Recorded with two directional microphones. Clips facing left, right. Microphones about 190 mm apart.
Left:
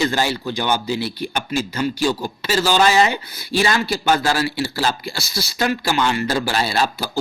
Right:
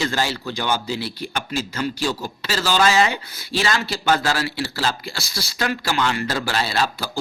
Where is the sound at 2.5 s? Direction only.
20° left (ahead or behind).